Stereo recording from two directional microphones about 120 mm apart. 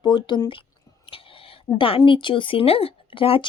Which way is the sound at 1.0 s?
50° left (ahead or behind).